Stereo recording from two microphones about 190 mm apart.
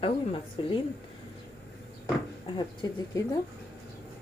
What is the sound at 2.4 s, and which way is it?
Speech, 25° left (ahead or behind).